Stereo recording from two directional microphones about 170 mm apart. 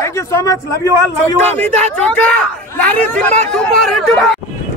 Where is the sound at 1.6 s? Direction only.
5° left (ahead or behind).